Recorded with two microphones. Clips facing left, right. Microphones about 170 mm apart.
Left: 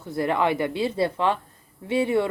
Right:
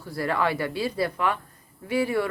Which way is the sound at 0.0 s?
20° left (ahead or behind).